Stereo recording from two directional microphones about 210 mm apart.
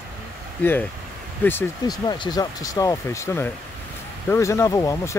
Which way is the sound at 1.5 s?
15° left (ahead or behind).